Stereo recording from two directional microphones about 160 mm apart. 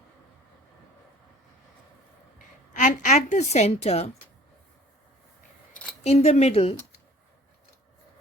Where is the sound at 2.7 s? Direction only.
50° left (ahead or behind).